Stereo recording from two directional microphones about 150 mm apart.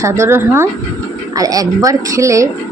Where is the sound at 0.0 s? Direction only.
15° right (ahead or behind).